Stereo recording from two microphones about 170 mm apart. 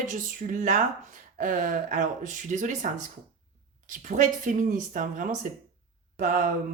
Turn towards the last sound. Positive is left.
turn(degrees=-50)  # may be behind; listen again after turning